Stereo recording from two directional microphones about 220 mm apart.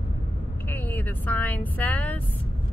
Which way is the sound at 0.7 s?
10° left (ahead or behind).